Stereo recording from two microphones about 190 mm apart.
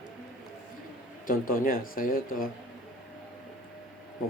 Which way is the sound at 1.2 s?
45° left (ahead or behind).